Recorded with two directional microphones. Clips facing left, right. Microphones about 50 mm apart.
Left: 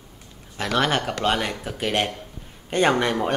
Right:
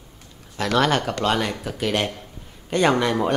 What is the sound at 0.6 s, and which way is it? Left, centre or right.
Speech, centre.